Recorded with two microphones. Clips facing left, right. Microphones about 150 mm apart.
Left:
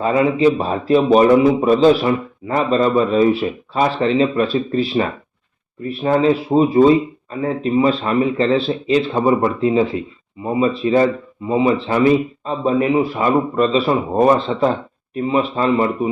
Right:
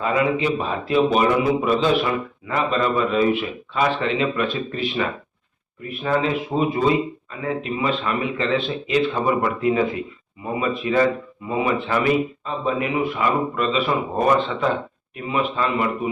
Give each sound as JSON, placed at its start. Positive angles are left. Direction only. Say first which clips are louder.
{"t": 0.0, "sound": "a man's voice", "louder": "left 6 dB", "side_deg": 35}